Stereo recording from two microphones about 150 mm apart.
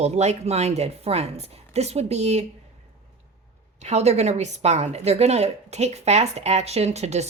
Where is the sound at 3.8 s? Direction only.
50° right (ahead or behind).